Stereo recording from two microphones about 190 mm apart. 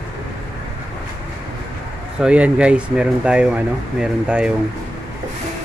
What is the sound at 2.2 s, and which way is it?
Speech, 5° right (ahead or behind).